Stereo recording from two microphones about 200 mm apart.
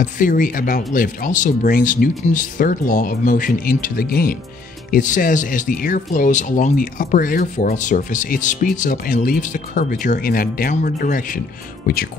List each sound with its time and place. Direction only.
0.0 s speech: 40° left (ahead or behind)